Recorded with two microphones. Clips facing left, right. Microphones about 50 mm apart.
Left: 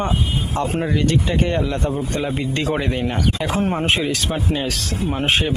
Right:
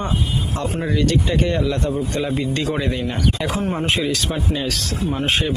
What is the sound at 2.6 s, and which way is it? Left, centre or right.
Speech, left.